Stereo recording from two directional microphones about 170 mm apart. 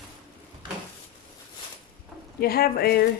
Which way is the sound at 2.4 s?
60° left (ahead or behind).